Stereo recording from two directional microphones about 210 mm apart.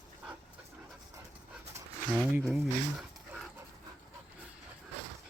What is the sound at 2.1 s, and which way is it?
Speech, 5° right (ahead or behind).